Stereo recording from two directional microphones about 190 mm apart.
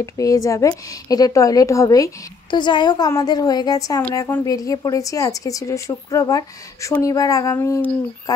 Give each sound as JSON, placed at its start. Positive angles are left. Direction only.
{"t": 0.0, "sound": "a woman's voice", "side_deg": 15}